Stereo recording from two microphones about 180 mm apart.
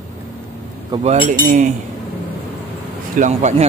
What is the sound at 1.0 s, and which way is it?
Speech, 45° right (ahead or behind).